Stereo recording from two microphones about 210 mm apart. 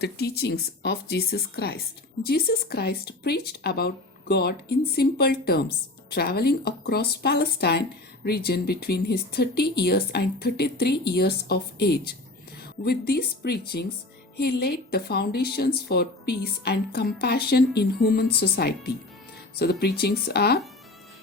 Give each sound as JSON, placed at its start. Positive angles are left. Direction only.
{"t": 0.0, "sound": "speech", "side_deg": 50}